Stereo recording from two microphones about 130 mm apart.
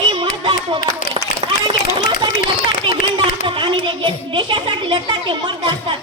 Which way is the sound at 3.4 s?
40° right (ahead or behind).